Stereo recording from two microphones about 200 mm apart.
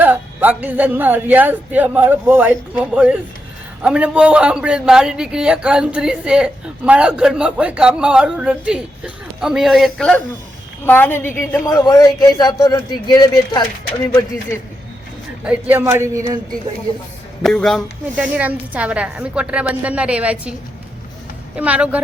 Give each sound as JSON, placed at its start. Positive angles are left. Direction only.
{"t": 0.0, "sound": "a man's voice", "side_deg": -10}
{"t": 15.4, "sound": "a man's voice", "side_deg": -10}
{"t": 17.4, "sound": "a man's voice", "side_deg": 0}